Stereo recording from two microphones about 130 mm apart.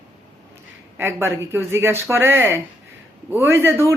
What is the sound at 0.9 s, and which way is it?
Speech, 20° right (ahead or behind).